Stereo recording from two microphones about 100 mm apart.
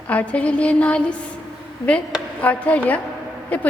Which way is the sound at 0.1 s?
15° left (ahead or behind).